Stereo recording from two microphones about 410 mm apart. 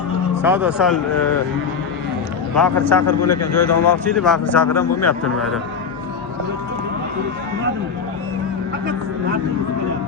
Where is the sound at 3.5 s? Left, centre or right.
Centre.